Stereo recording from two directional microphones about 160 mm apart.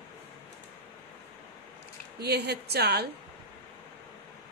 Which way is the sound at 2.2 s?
90° right.